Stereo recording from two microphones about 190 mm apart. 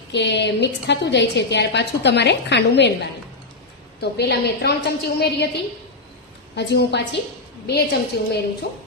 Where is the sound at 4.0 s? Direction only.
60° left (ahead or behind).